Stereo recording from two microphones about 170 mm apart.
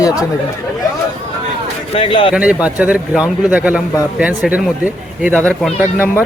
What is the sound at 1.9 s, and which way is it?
Speech, 35° left (ahead or behind).